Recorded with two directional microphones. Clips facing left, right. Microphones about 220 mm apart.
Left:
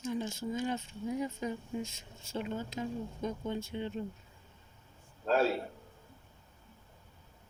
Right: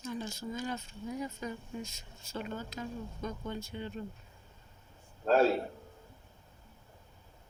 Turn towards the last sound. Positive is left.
turn(degrees=-45)  # may be behind; listen again after turning